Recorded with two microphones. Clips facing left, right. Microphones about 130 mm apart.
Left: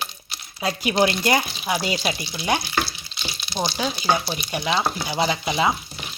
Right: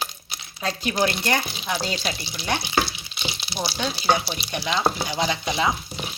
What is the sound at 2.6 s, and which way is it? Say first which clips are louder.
Frying: right 2 dB; 20° right (ahead or behind).